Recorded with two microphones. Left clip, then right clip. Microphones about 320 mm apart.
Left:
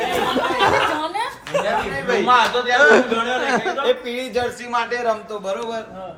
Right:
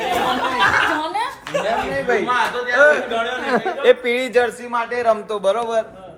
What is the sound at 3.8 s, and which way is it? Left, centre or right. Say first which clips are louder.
Speech: right 6 dB; right.